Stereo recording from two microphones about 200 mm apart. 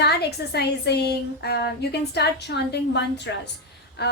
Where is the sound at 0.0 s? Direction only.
55° left (ahead or behind).